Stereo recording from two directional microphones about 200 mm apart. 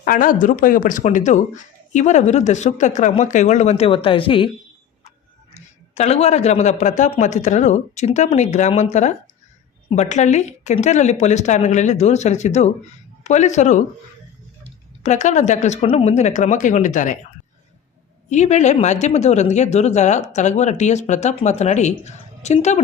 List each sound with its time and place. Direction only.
0.0 s speech: 45° left (ahead or behind); by 4.4 s 25° left (ahead or behind)
5.5 s speech: 35° left (ahead or behind)
15.0 s speech: 35° left (ahead or behind)
18.3 s speech: 35° left (ahead or behind)